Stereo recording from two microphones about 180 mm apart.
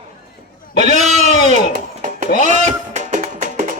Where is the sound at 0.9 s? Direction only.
40° right (ahead or behind).